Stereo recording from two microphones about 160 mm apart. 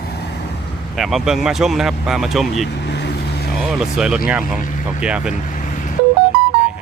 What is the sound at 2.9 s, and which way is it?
Vehicle, 90° left.